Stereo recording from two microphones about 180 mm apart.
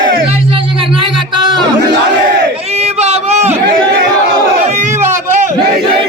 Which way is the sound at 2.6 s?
35° right (ahead or behind).